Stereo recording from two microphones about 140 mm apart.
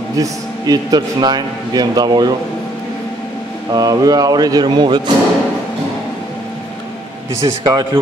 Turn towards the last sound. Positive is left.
turn(degrees=-30)  # may be behind; listen again after turning